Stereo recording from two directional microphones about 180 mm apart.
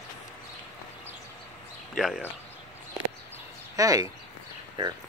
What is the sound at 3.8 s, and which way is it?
Speech, 20° right (ahead or behind).